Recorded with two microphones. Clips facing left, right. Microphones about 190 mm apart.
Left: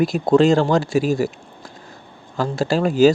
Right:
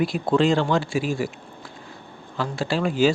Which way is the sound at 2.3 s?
40° left (ahead or behind).